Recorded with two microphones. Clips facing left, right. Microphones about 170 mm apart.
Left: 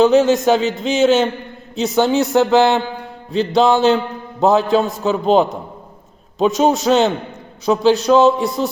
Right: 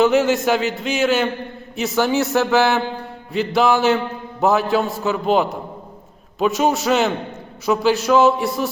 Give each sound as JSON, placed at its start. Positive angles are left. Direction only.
{"t": 0.0, "sound": "a man's voice", "side_deg": 20}